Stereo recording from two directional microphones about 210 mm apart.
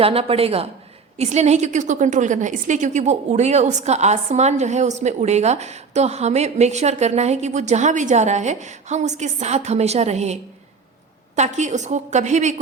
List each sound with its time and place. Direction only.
0.0 s a woman's voice: 25° right (ahead or behind)
11.3 s a woman's voice: 35° right (ahead or behind)